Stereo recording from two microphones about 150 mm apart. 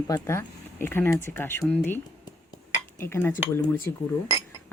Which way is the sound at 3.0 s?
15° left (ahead or behind).